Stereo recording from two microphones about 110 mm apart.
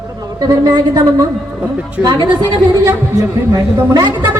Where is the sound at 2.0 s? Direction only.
40° right (ahead or behind).